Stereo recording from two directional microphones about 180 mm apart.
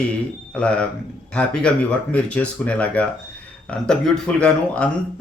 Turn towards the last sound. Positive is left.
turn(degrees=5)  # may be behind; listen again after turning